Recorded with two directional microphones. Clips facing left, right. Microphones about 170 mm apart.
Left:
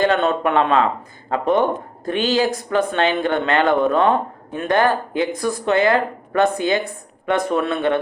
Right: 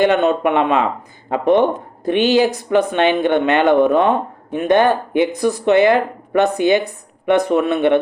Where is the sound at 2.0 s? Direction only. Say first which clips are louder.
Right 5 dB; 20° right (ahead or behind).